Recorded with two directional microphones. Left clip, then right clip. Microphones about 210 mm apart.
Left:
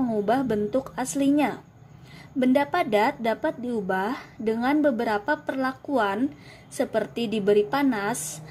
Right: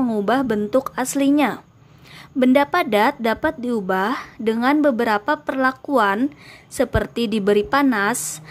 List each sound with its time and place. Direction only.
0.0 s speech: 25° right (ahead or behind)